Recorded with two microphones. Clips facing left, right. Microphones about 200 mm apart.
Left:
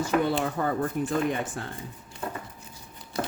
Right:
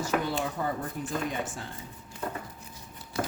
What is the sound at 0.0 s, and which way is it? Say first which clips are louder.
Speech: left 4 dB; 60° left (ahead or behind).